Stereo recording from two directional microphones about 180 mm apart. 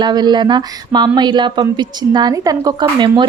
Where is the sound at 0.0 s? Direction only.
25° right (ahead or behind).